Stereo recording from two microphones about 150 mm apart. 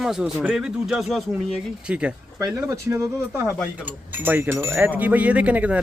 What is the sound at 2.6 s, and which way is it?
A man's voice, 20° right (ahead or behind).